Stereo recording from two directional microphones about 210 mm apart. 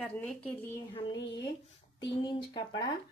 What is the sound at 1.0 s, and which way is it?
A woman's voice, 25° left (ahead or behind).